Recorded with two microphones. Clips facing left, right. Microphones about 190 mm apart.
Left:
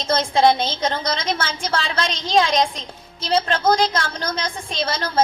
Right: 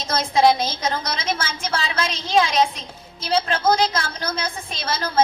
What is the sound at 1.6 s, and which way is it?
A woman's voice, 30° left (ahead or behind).